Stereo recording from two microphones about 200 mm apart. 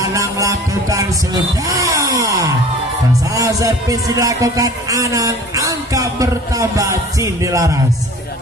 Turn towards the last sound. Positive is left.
turn(degrees=-15)  # may be behind; listen again after turning